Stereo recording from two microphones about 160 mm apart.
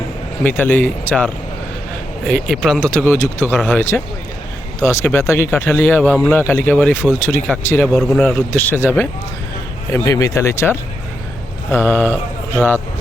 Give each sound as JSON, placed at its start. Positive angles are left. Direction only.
{"t": 0.4, "sound": "speech", "side_deg": 10}
{"t": 7.9, "sound": "speech", "side_deg": 5}